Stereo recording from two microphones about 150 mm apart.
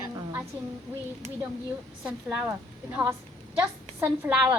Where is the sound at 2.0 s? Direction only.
10° right (ahead or behind).